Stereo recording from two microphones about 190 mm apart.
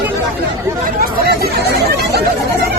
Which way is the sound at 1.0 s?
55° right (ahead or behind).